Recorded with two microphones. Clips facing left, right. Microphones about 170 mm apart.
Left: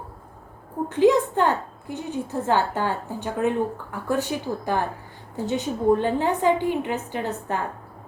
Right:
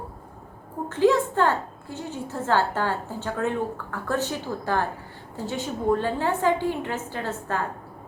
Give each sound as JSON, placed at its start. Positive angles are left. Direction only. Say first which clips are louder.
{"t": 0.9, "sound": "a woman's voice", "louder": "left 2 dB", "side_deg": 15}